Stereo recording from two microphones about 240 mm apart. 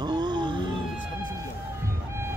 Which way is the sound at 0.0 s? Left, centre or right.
Centre.